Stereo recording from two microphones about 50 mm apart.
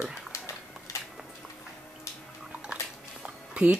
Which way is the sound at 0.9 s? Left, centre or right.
Left.